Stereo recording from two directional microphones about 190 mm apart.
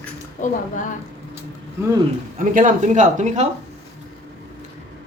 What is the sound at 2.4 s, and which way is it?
Speech, 40° right (ahead or behind).